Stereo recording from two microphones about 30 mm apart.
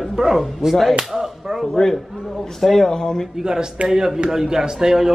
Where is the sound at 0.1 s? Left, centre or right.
Centre.